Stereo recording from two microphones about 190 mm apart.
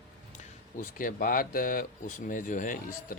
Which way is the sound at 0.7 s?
45° left (ahead or behind).